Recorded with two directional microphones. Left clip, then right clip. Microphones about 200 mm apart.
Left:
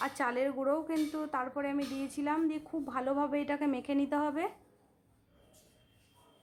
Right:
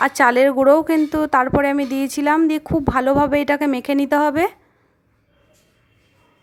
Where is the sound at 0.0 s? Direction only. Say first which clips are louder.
Right 19 dB; 40° right (ahead or behind).